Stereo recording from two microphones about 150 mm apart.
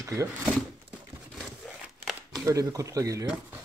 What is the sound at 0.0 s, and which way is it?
Speech, 20° right (ahead or behind).